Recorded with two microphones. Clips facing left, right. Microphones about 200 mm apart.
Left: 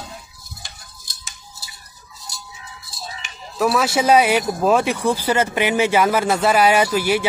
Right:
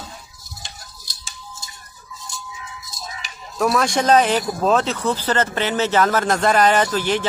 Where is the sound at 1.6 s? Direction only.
35° left (ahead or behind).